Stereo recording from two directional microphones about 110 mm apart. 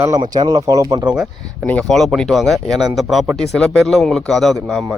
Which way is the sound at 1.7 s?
5° left (ahead or behind).